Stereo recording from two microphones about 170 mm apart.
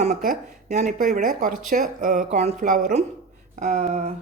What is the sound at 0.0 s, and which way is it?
Speech, 50° right (ahead or behind).